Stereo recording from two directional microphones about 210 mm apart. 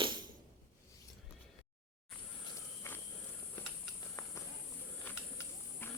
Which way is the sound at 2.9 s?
10° left (ahead or behind).